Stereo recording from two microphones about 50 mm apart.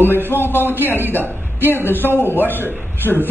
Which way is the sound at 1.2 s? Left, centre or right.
Right.